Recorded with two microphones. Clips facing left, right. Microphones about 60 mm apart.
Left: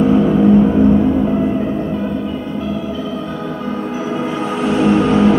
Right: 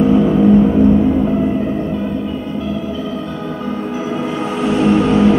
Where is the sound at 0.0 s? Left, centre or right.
Centre.